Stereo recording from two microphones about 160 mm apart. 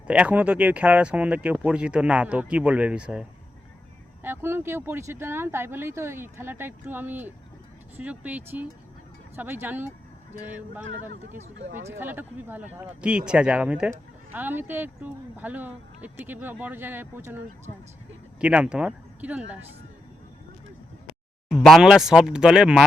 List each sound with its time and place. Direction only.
0.1 s speech: 10° right (ahead or behind)
21.5 s speech: centre (ahead or behind)